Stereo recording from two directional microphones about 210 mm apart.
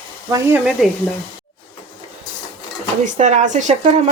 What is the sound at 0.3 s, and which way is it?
Speech, 15° right (ahead or behind).